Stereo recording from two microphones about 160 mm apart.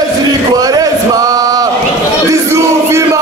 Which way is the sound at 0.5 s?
25° right (ahead or behind).